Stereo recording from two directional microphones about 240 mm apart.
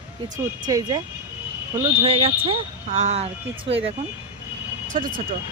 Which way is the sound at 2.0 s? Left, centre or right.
Right.